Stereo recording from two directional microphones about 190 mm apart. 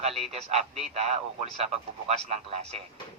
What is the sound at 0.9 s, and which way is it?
Speech, 35° right (ahead or behind).